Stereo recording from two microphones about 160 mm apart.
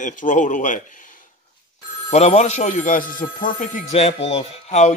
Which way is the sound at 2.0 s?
45° left (ahead or behind).